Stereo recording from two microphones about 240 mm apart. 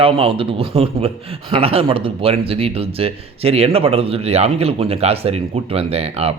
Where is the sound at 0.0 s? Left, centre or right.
Right.